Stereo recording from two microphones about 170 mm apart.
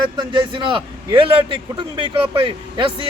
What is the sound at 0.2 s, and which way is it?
A man's voice, 30° right (ahead or behind).